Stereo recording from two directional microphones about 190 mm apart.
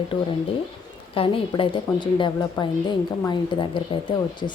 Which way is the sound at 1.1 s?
30° left (ahead or behind).